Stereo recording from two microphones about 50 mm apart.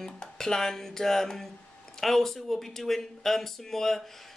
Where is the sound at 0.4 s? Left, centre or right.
Centre.